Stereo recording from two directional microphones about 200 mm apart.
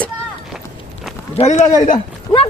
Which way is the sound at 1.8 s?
30° left (ahead or behind).